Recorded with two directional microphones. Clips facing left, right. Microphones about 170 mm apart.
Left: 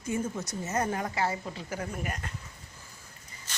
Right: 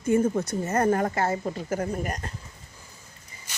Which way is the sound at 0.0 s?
55° right (ahead or behind).